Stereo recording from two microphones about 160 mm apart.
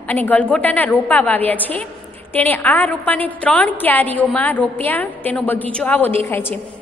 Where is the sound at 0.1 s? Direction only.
10° left (ahead or behind).